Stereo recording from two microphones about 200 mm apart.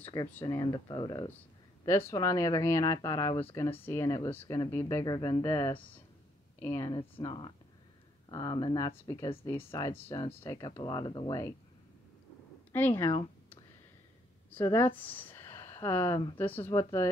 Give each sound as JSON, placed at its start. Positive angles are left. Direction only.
{"t": 0.0, "sound": "a sound", "side_deg": 20}
{"t": 0.3, "sound": "speech", "side_deg": 15}
{"t": 7.0, "sound": "speech", "side_deg": 25}
{"t": 12.7, "sound": "a woman's voice", "side_deg": 10}